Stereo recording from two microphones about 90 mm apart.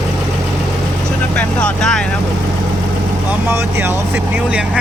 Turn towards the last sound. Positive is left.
turn(degrees=-10)  # may be behind; listen again after turning